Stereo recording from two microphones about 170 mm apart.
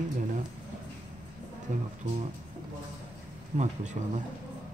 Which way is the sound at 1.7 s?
50° right (ahead or behind).